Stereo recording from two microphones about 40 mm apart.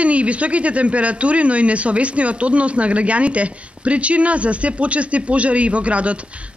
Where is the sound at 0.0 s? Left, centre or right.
Right.